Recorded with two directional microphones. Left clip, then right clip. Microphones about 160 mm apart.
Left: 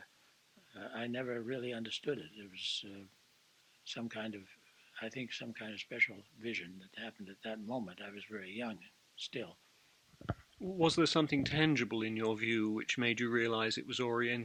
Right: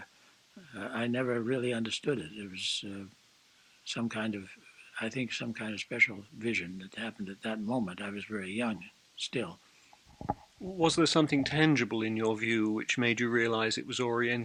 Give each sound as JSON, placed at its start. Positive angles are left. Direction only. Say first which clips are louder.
{"t": 0.7, "sound": "speech", "louder": "right 8 dB", "side_deg": 35}
{"t": 10.8, "sound": "speech", "louder": "right 4 dB", "side_deg": 30}